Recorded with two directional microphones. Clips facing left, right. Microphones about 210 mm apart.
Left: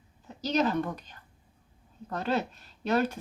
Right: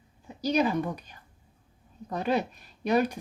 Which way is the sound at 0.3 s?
10° right (ahead or behind).